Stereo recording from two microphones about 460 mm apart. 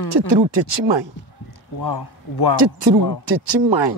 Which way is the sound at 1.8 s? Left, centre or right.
Left.